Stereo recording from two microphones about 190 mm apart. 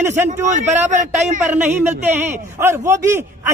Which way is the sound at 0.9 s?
40° right (ahead or behind).